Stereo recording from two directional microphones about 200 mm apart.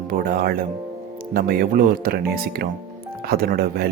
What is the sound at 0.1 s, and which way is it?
Speech, 45° right (ahead or behind).